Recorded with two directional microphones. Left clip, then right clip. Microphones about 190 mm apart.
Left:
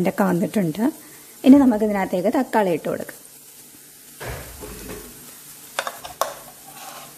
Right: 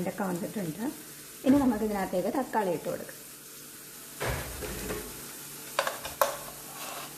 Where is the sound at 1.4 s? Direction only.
45° left (ahead or behind).